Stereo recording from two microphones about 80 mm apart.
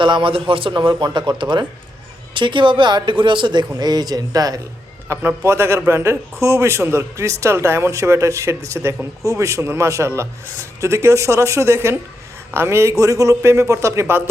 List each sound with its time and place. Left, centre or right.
0.0 s speech: right
2.3 s speech: right
3.8 s speech: right
5.0 s a man's voice: right